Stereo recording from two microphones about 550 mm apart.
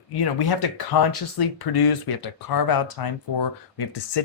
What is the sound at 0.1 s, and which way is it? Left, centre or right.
Speech, left.